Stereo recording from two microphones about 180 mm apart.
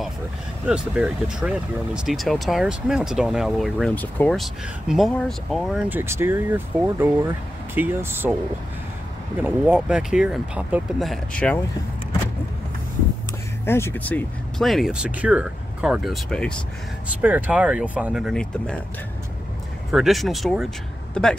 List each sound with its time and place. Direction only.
0.7 s speech: 5° right (ahead or behind)
4.3 s speech: centre (ahead or behind)
5.9 s speech: 15° right (ahead or behind)
9.4 s speech: 5° right (ahead or behind)
13.7 s speech: 15° left (ahead or behind)
17.2 s speech: 10° right (ahead or behind)
19.9 s speech: centre (ahead or behind)